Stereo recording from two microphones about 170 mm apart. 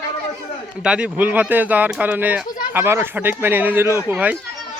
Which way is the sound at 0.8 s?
5° right (ahead or behind).